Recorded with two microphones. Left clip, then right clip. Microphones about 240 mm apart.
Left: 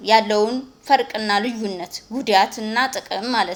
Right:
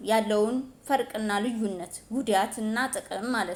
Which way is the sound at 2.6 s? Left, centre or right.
Centre.